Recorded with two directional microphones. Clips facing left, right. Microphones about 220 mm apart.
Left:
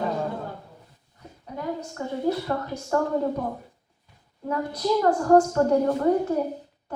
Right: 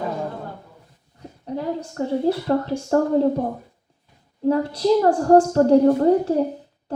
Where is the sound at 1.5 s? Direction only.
30° right (ahead or behind).